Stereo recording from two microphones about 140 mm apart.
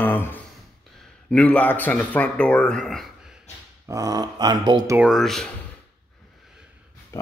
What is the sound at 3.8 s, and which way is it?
Speech, 25° right (ahead or behind).